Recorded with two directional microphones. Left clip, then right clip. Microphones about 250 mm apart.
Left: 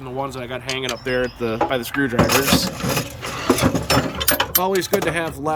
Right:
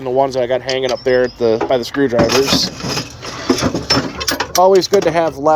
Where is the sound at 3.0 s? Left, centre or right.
Left.